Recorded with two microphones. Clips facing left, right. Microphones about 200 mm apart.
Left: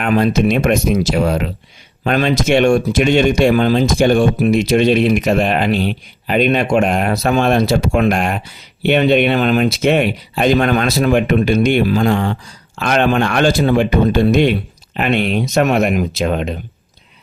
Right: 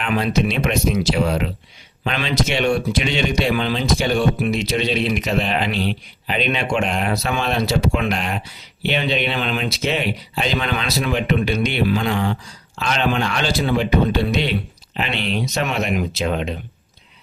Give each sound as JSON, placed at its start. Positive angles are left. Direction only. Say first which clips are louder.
{"t": 0.0, "sound": "speech", "louder": "left 6 dB", "side_deg": 45}